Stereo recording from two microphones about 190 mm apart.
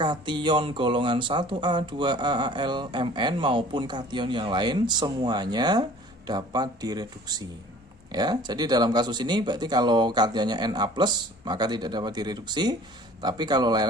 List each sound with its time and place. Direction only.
0.0 s speech: 25° right (ahead or behind)